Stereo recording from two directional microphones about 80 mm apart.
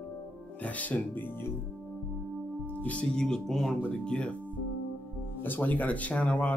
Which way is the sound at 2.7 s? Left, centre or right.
Centre.